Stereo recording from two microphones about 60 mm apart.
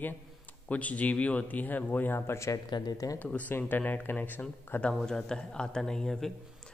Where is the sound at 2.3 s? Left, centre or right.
Left.